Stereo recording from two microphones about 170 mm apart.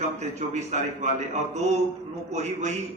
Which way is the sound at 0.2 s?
45° right (ahead or behind).